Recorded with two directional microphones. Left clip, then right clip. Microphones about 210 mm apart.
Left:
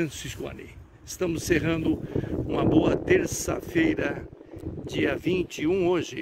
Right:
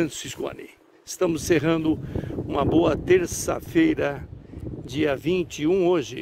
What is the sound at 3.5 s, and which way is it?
Speech, 20° right (ahead or behind).